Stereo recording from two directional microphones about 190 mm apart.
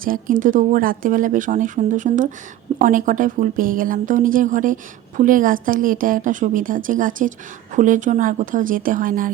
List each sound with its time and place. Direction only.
0.0 s speech: 45° right (ahead or behind)